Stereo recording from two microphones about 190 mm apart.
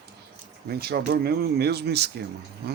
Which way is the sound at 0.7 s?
60° right (ahead or behind).